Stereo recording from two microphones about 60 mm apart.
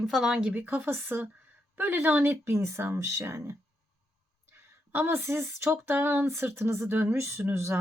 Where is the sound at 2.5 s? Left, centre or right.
Right.